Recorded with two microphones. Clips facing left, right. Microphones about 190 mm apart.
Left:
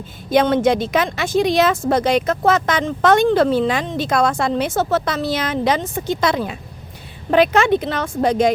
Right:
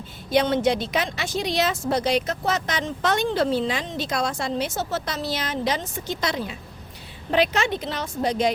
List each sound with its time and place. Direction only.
0.3 s speech: 50° left (ahead or behind)